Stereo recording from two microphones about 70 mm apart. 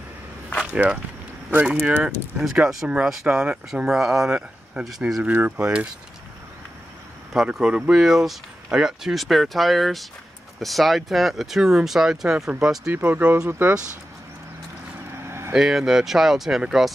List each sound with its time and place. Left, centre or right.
1.7 s speech: centre
5.2 s speech: right
7.3 s speech: centre
8.0 s speech: centre
12.9 s speech: right
15.2 s vehicle: right
15.5 s speech: centre